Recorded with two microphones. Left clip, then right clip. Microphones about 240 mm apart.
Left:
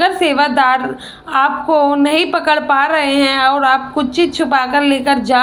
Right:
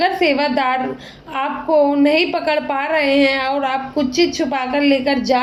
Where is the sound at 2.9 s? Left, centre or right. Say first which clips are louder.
Left 1 dB; centre.